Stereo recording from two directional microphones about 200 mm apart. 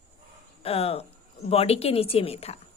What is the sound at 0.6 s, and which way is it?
A woman's voice, 30° left (ahead or behind).